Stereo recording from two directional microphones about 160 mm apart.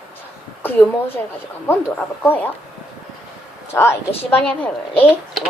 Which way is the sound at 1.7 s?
10° left (ahead or behind).